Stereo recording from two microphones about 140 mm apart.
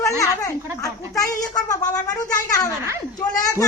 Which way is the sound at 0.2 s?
25° left (ahead or behind).